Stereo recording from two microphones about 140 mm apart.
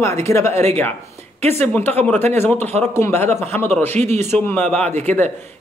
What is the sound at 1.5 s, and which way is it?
Speech, 15° left (ahead or behind).